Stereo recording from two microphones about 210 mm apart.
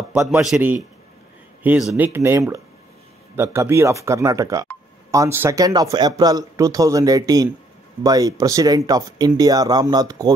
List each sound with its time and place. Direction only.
0.1 s speech: 5° right (ahead or behind)